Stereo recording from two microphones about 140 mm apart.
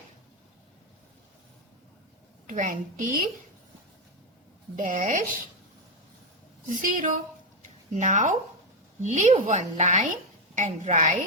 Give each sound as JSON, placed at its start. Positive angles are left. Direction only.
{"t": 2.5, "sound": "a woman's voice", "side_deg": -65}
{"t": 4.8, "sound": "a woman's voice", "side_deg": -70}
{"t": 6.7, "sound": "a woman's voice", "side_deg": -70}
{"t": 7.6, "sound": "a sound", "side_deg": -60}
{"t": 9.0, "sound": "a woman's voice", "side_deg": -55}